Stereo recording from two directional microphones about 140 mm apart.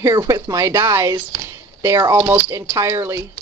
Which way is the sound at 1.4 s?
20° right (ahead or behind).